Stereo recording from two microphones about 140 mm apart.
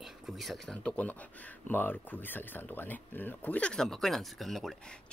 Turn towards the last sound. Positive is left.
turn(degrees=0)  # may be behind; listen again after turning